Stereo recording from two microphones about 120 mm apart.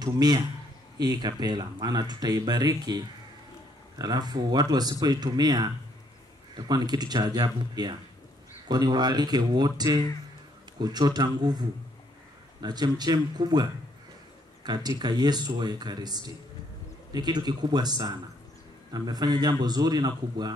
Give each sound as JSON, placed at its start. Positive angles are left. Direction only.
{"t": 0.0, "sound": "speech", "side_deg": -35}
{"t": 4.0, "sound": "speech", "side_deg": -35}
{"t": 12.6, "sound": "speech", "side_deg": -35}